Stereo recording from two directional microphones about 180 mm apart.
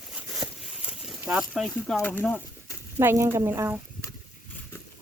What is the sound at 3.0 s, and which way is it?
Speech, 10° right (ahead or behind).